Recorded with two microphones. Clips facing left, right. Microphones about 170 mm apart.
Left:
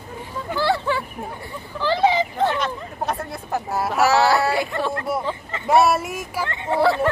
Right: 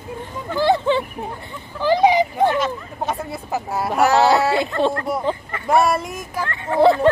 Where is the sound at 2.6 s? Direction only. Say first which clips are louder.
Right 3 dB; centre (ahead or behind).